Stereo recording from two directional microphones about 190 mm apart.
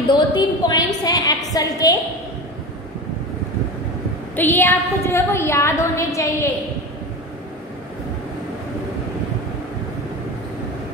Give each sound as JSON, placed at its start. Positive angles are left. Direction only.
{"t": 0.1, "sound": "a woman's voice", "side_deg": 20}
{"t": 4.4, "sound": "a woman's voice", "side_deg": 10}